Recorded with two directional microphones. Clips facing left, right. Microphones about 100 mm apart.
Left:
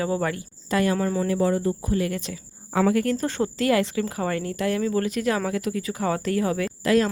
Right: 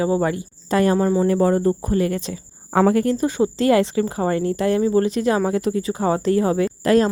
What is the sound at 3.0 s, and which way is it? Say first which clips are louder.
Speech: right 5 dB; 25° right (ahead or behind).